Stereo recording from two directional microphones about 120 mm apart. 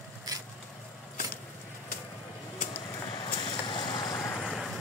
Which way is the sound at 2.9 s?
35° left (ahead or behind).